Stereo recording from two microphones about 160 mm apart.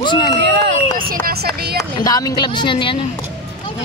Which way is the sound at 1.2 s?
75° right (ahead or behind).